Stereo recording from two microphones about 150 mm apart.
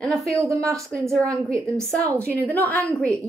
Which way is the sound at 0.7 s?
20° right (ahead or behind).